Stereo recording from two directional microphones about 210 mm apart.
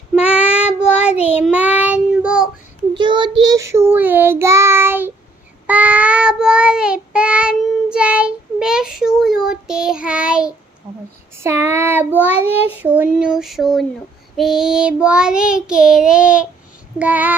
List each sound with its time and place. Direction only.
0.2 s child singing: 5° right (ahead or behind)
2.9 s child singing: 20° right (ahead or behind)
12.8 s a sound: 10° right (ahead or behind)
14.3 s child singing: centre (ahead or behind)